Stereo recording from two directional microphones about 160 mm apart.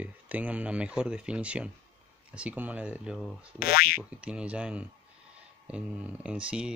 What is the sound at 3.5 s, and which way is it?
Boing, 70° left (ahead or behind).